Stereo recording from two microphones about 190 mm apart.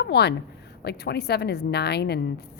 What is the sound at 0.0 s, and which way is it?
A woman's voice, 60° left (ahead or behind).